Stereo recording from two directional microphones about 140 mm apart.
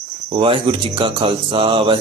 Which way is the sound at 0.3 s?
40° right (ahead or behind).